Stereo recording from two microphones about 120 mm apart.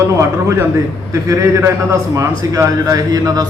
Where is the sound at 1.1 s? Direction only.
25° right (ahead or behind).